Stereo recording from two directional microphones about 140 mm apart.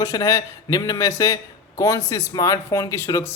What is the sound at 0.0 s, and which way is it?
Speech, 20° left (ahead or behind).